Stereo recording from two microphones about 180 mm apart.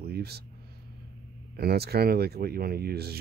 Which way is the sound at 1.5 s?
60° right (ahead or behind).